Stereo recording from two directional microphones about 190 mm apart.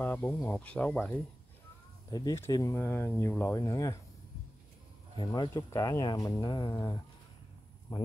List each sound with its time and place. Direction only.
0.0 s speech: 10° left (ahead or behind)
2.0 s speech: 20° left (ahead or behind)
5.1 s speech: 25° left (ahead or behind)